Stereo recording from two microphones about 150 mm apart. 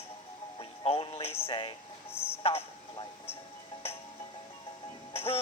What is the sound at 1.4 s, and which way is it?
Speech, 40° left (ahead or behind).